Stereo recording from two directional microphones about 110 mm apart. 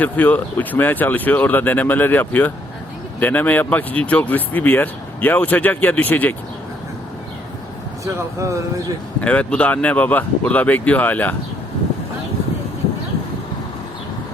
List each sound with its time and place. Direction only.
0.0 s speech: 15° left (ahead or behind)
8.0 s speech: 30° right (ahead or behind)
9.2 s speech: 10° left (ahead or behind)